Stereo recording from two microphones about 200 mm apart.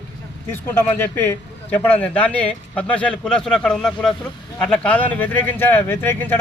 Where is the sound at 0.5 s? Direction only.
10° left (ahead or behind).